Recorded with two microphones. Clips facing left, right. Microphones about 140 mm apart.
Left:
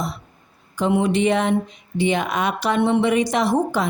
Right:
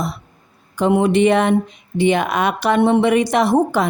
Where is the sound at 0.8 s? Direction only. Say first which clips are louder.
Right 4 dB; 55° right (ahead or behind).